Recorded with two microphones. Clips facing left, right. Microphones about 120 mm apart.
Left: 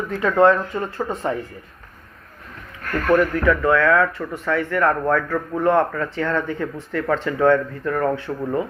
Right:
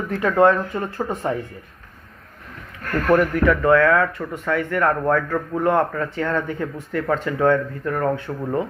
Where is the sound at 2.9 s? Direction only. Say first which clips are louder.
Even; 15° right (ahead or behind).